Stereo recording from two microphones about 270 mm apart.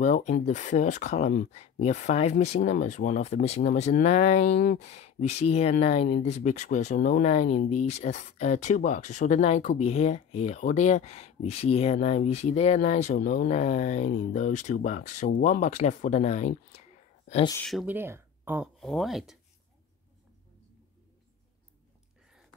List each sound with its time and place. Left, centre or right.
0.0 s speech: left
17.6 s speech: centre